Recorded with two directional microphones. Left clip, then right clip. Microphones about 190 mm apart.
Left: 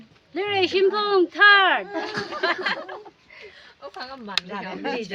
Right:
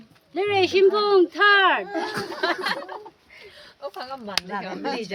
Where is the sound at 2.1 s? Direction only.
55° right (ahead or behind).